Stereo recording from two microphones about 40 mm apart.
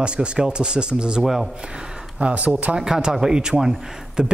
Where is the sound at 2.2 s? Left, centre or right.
Right.